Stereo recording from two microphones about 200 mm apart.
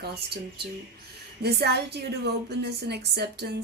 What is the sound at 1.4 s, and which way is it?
A woman's voice, 55° right (ahead or behind).